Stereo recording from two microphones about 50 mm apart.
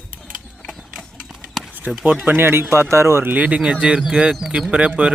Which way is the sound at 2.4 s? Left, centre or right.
Right.